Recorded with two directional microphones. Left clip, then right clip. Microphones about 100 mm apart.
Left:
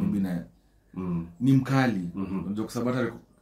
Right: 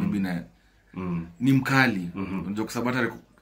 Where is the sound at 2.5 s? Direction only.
25° left (ahead or behind).